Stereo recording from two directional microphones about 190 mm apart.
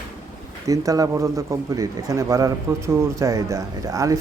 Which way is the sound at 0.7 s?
20° right (ahead or behind).